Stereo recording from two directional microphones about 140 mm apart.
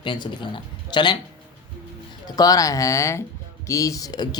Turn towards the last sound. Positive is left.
turn(degrees=30)  # may be behind; listen again after turning